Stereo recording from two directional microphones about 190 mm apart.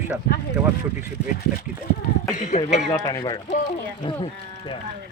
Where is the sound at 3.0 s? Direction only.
20° left (ahead or behind).